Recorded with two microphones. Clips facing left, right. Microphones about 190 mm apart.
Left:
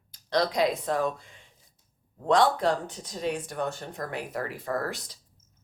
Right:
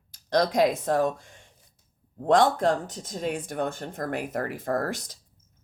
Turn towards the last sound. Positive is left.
turn(degrees=-45)  # may be behind; listen again after turning